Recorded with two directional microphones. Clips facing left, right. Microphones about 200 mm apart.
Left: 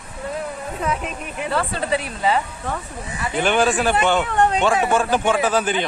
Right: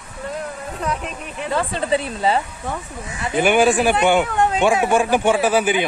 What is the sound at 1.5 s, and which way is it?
Speech, 15° right (ahead or behind).